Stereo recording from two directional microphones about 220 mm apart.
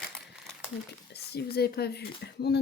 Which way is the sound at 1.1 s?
45° left (ahead or behind).